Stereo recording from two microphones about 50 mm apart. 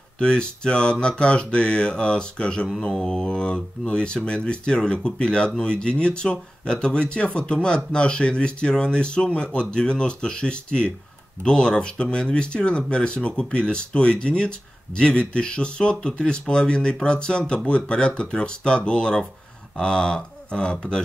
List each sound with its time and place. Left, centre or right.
0.2 s speech: centre